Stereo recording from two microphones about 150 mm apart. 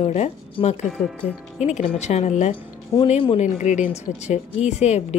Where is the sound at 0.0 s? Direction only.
45° left (ahead or behind).